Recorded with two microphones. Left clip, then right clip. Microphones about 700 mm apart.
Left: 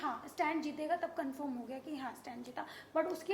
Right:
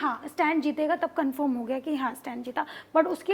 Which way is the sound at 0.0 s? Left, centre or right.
Right.